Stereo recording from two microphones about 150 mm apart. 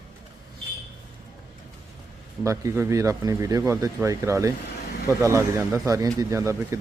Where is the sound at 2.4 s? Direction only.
20° right (ahead or behind).